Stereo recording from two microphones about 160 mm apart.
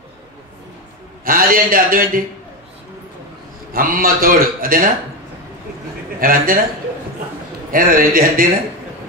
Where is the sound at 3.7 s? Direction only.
60° right (ahead or behind).